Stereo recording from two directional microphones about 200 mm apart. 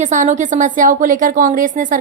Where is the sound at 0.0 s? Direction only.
40° right (ahead or behind).